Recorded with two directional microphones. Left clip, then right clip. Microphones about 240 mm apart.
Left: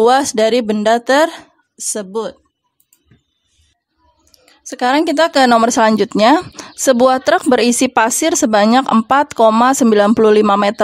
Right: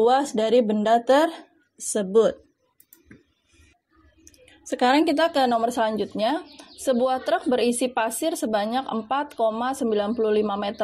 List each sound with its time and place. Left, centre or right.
0.0 s speech: left; by 2.2 s centre
4.5 s speech: centre; by 10.8 s left